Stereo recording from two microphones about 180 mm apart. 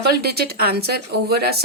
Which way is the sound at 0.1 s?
60° right (ahead or behind).